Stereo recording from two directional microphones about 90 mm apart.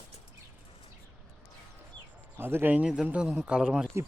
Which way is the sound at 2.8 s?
10° right (ahead or behind).